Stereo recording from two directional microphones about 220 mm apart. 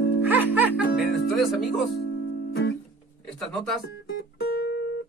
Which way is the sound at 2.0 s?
50° left (ahead or behind).